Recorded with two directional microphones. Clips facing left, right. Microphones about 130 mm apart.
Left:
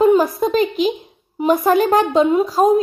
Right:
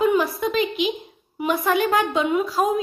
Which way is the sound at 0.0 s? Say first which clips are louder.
Left 6 dB; 40° left (ahead or behind).